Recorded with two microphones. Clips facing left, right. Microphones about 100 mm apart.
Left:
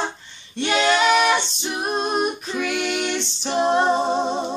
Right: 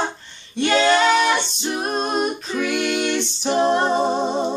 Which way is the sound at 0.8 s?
30° right (ahead or behind).